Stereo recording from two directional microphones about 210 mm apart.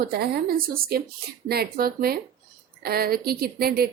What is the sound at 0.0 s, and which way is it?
A woman's voice, 45° right (ahead or behind).